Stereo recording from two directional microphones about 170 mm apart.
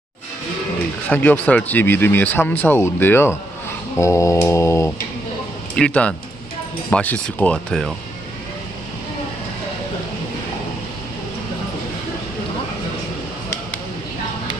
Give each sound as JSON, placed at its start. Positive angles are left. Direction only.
{"t": 1.0, "sound": "speech", "side_deg": 10}
{"t": 5.8, "sound": "speech", "side_deg": 5}